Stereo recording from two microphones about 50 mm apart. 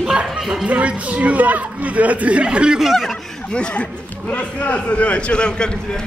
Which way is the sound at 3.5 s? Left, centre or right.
Left.